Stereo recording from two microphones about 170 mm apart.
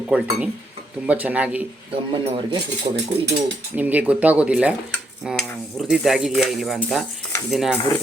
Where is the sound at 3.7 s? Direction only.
10° right (ahead or behind).